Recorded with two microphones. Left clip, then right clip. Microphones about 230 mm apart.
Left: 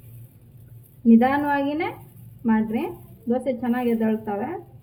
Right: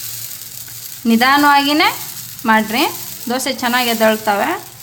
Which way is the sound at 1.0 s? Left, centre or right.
Right.